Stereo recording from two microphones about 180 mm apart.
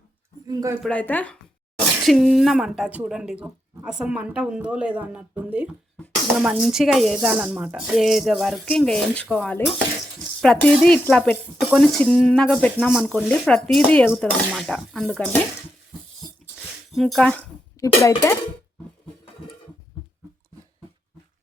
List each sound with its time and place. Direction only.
0.4 s speech: 20° right (ahead or behind)
0.8 s speech: 5° left (ahead or behind)
16.9 s speech: centre (ahead or behind)
17.7 s speech: 15° left (ahead or behind)